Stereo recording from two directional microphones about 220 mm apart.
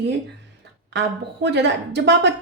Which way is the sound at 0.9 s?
50° right (ahead or behind).